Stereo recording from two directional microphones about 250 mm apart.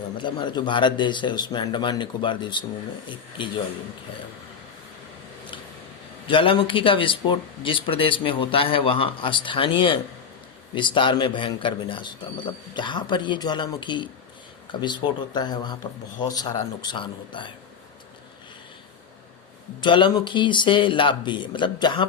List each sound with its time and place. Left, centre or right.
0.2 s speech: centre
6.2 s speech: left
19.8 s speech: centre